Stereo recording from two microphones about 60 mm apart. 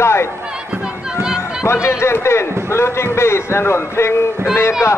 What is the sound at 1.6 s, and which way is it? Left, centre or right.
A man's voice, left.